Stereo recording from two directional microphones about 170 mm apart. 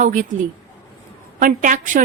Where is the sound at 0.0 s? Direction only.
50° right (ahead or behind).